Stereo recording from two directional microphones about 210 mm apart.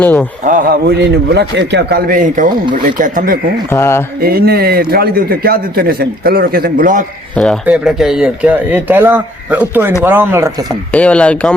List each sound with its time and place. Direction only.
0.0 s speech: 10° left (ahead or behind)
0.4 s a man's voice: 40° right (ahead or behind)
3.7 s speech: 10° left (ahead or behind)
4.2 s a man's voice: 45° right (ahead or behind)
7.3 s speech: centre (ahead or behind); by 10.7 s 15° right (ahead or behind)
10.9 s speech: 5° left (ahead or behind)